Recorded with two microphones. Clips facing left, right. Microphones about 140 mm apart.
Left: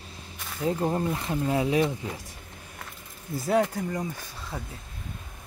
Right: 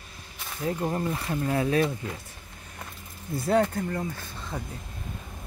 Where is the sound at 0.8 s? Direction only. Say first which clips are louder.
Left 1 dB; 15° left (ahead or behind).